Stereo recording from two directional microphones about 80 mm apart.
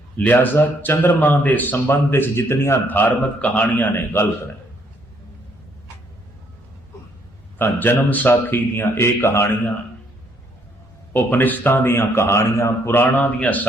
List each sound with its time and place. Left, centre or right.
0.2 s speech: left
7.6 s speech: left
11.1 s speech: left